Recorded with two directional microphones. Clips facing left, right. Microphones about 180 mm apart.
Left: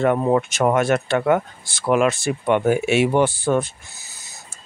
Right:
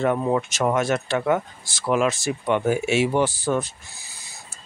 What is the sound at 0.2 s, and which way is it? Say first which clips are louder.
Speech: left 4 dB; 55° left (ahead or behind).